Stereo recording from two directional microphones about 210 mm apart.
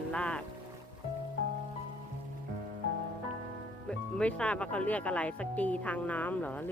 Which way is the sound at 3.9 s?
5° left (ahead or behind).